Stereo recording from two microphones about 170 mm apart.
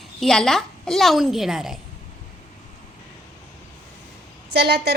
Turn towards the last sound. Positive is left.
turn(degrees=-80)